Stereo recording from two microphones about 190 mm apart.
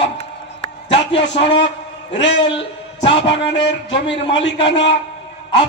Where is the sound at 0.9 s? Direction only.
65° left (ahead or behind).